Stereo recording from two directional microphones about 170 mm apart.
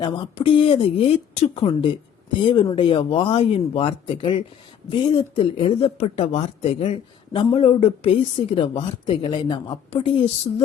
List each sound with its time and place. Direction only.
0.0 s speech: 30° left (ahead or behind)